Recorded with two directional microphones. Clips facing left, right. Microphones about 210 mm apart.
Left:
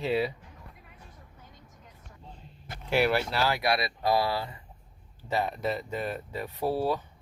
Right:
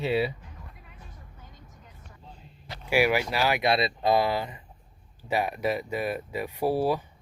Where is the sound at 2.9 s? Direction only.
10° right (ahead or behind).